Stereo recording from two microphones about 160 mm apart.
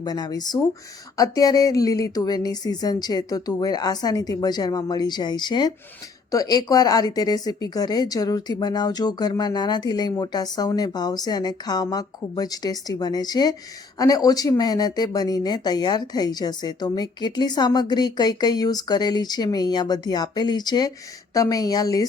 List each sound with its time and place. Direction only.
0.0 s a woman's voice: 25° left (ahead or behind)